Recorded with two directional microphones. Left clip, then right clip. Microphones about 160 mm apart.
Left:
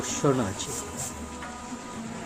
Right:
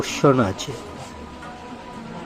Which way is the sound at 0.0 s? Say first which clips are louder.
Right 8 dB; 25° right (ahead or behind).